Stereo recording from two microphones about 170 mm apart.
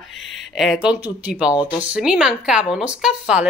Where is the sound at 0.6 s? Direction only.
5° right (ahead or behind).